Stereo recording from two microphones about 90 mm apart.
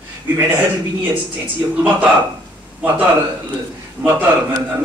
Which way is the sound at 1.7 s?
20° right (ahead or behind).